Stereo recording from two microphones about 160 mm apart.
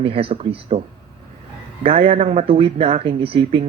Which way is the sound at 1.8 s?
35° right (ahead or behind).